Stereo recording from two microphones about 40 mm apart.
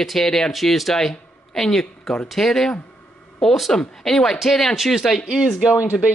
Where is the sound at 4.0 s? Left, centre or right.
Centre.